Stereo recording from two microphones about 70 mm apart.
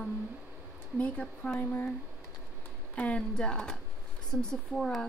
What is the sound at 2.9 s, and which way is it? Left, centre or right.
Speech, centre.